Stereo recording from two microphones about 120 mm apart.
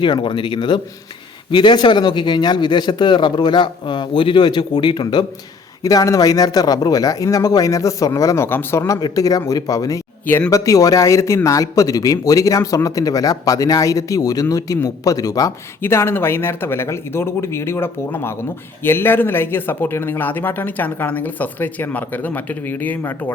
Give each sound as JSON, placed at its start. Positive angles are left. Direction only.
{"t": 0.0, "sound": "speech", "side_deg": 40}
{"t": 5.8, "sound": "speech", "side_deg": 30}
{"t": 9.0, "sound": "speech", "side_deg": 30}
{"t": 10.2, "sound": "speech", "side_deg": 20}